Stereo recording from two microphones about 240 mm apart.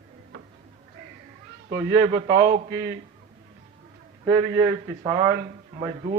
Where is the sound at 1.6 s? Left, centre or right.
Centre.